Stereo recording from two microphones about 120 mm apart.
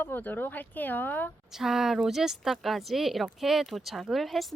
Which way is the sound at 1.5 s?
5° right (ahead or behind).